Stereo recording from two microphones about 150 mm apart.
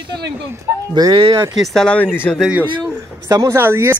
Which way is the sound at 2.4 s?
5° right (ahead or behind).